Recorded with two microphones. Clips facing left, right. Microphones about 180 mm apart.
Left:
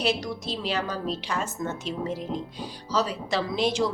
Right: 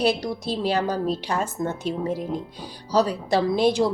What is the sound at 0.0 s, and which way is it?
A woman's voice, 35° right (ahead or behind).